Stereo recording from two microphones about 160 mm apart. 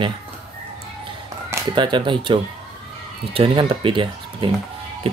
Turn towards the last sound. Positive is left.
turn(degrees=-35)  # may be behind; listen again after turning